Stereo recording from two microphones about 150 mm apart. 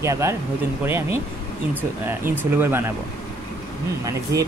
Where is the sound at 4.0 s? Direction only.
25° right (ahead or behind).